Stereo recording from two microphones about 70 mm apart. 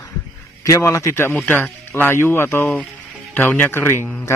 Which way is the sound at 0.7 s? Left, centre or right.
Left.